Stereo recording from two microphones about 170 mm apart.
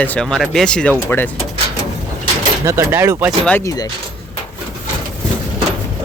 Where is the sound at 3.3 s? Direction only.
5° left (ahead or behind).